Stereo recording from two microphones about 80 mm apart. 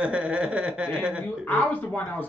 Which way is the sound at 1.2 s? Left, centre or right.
Left.